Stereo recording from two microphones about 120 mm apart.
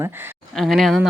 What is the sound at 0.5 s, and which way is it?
Speech, centre (ahead or behind).